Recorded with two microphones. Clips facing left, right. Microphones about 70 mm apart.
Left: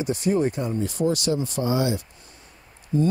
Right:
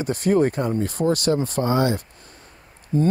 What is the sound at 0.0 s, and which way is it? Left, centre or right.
Speech, right.